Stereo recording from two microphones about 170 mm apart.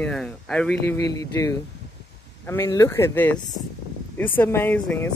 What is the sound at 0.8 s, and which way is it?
Speech, 20° left (ahead or behind).